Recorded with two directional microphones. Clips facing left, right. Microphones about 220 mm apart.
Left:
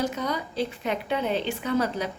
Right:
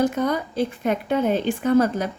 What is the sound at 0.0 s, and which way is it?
A woman's voice, 55° right (ahead or behind).